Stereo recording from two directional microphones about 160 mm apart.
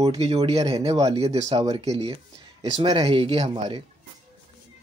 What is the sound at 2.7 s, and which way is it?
Speech, 30° right (ahead or behind).